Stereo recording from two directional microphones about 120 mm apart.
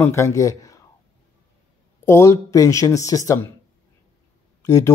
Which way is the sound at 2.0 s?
25° left (ahead or behind).